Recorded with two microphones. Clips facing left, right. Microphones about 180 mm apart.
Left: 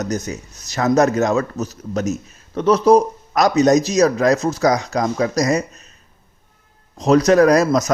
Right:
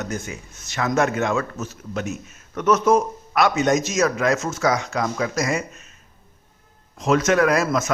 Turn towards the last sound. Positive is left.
turn(degrees=40)  # may be behind; listen again after turning